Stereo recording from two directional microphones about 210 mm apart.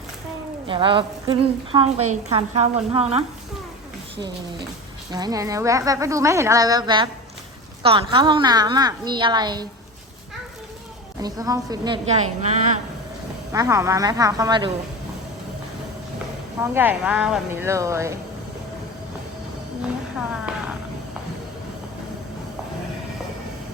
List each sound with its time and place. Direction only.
0.7 s a woman's voice: 25° right (ahead or behind)
5.1 s a woman's voice: 20° right (ahead or behind)
11.2 s speech: 15° right (ahead or behind)
12.4 s speech: 30° right (ahead or behind)
13.5 s speech: 15° right (ahead or behind)
16.6 s speech: 10° right (ahead or behind)
20.1 s speech: 5° right (ahead or behind)